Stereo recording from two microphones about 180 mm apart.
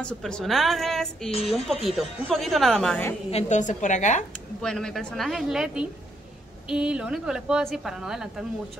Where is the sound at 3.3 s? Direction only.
40° left (ahead or behind).